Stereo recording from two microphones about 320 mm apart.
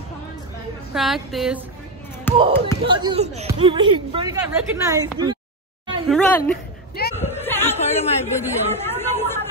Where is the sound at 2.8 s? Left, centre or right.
Centre.